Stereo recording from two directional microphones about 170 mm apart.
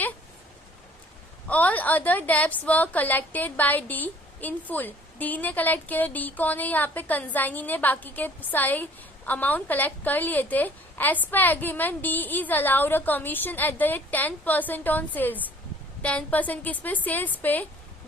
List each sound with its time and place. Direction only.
1.5 s a woman's voice: 10° left (ahead or behind)